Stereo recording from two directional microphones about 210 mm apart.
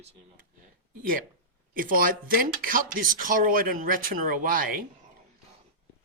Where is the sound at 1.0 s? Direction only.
40° right (ahead or behind).